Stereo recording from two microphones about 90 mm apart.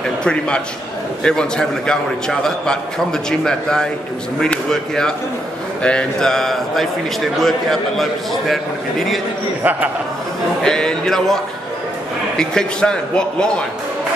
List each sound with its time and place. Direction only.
0.2 s a man's voice: 10° left (ahead or behind)
9.6 s a man's voice: 20° right (ahead or behind)
10.6 s a man's voice: 5° left (ahead or behind)
12.4 s a man's voice: 10° left (ahead or behind)